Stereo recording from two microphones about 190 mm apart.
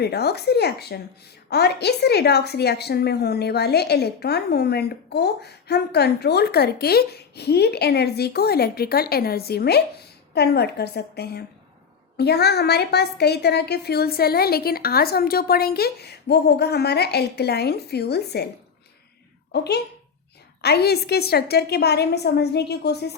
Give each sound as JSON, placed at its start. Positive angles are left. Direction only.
{"t": 0.0, "sound": "a woman's voice", "side_deg": 60}
{"t": 19.5, "sound": "a woman's voice", "side_deg": 60}